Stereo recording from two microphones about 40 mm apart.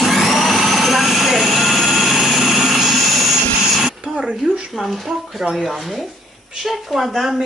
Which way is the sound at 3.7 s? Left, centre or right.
Centre.